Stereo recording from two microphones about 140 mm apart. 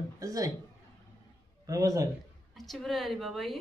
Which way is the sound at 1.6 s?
25° right (ahead or behind).